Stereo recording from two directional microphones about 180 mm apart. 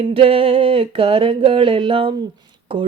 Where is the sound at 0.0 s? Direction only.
30° right (ahead or behind).